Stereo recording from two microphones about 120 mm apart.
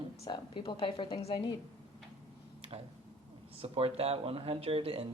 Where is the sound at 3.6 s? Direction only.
55° right (ahead or behind).